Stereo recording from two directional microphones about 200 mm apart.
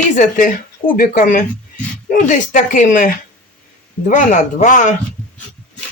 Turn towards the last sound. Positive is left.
turn(degrees=40)  # may be behind; listen again after turning